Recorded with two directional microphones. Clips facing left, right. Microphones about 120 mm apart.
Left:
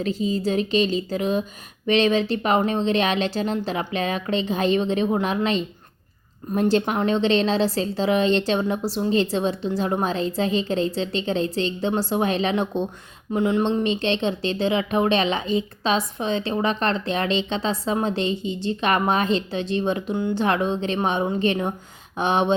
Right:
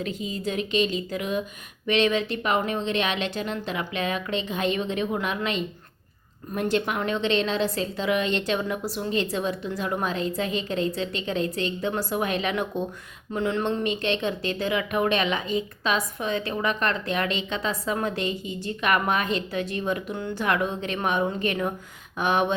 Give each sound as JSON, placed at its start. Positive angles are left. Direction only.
{"t": 0.0, "sound": "speech", "side_deg": 30}